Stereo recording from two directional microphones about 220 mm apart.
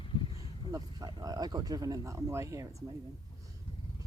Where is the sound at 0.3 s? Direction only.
15° right (ahead or behind).